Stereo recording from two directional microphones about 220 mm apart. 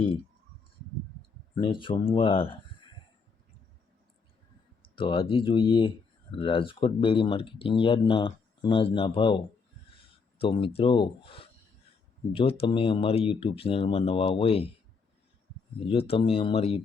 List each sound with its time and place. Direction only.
1.5 s speech: 25° left (ahead or behind)
4.8 s speech: 25° left (ahead or behind)
15.9 s speech: 25° left (ahead or behind)